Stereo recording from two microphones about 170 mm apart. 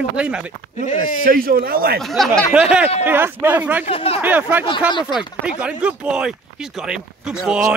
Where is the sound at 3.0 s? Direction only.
10° right (ahead or behind).